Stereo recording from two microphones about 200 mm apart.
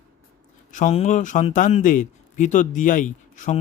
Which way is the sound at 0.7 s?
40° left (ahead or behind).